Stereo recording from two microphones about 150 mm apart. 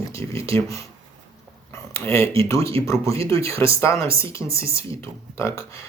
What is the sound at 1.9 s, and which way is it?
Speech, 20° left (ahead or behind).